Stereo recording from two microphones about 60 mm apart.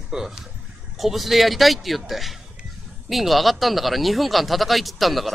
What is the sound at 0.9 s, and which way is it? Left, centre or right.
Speech, centre.